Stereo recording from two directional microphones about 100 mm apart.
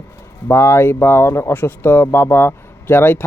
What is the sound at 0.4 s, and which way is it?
Speech, 25° left (ahead or behind).